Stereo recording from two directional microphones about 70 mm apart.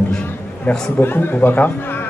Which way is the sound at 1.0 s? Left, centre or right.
Left.